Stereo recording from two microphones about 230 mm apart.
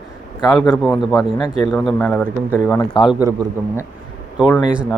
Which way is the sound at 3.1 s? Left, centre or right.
Centre.